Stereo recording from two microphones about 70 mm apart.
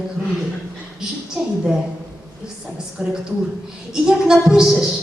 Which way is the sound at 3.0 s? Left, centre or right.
Centre.